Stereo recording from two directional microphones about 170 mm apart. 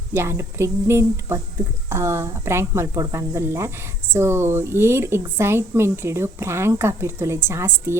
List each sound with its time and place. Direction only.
0.1 s speech: 15° right (ahead or behind)